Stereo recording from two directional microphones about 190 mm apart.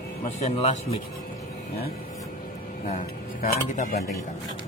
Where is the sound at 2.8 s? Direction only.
35° left (ahead or behind).